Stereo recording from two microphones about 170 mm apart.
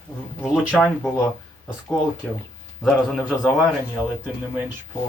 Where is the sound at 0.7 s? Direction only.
5° left (ahead or behind).